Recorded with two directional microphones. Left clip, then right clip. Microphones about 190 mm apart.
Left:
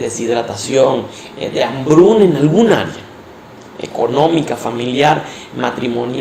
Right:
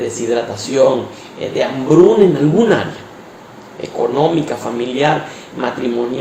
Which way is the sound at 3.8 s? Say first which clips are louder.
Left 1 dB; 45° left (ahead or behind).